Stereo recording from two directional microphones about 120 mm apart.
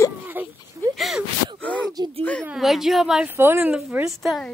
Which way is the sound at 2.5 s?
Centre (ahead or behind).